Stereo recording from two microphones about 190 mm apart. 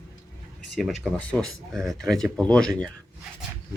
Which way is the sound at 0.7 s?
5° left (ahead or behind).